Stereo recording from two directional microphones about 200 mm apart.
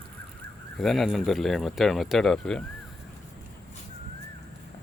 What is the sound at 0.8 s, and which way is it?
Speech, centre (ahead or behind).